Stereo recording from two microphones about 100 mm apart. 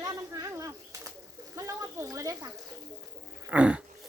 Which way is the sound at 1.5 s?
30° right (ahead or behind).